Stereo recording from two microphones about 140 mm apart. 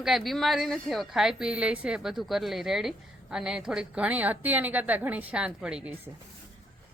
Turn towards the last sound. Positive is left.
turn(degrees=-5)  # may be behind; listen again after turning